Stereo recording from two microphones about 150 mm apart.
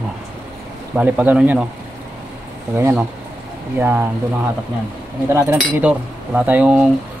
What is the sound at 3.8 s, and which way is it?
Speech, 15° right (ahead or behind).